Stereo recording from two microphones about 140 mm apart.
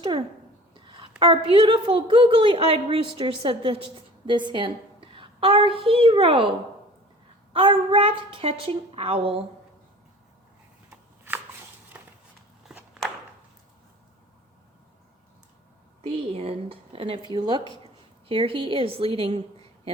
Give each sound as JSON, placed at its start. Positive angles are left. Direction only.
{"t": 0.0, "sound": "a sound", "side_deg": -35}
{"t": 1.2, "sound": "a woman's voice", "side_deg": -40}
{"t": 7.5, "sound": "a woman's voice", "side_deg": -40}
{"t": 11.9, "sound": "a sound", "side_deg": -10}
{"t": 12.6, "sound": "walk", "side_deg": -5}
{"t": 16.0, "sound": "a woman's voice", "side_deg": -45}